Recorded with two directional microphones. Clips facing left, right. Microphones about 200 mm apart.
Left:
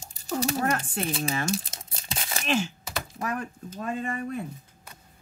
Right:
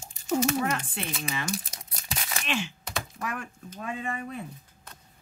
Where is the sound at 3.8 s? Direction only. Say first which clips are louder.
Left 3 dB; 45° left (ahead or behind).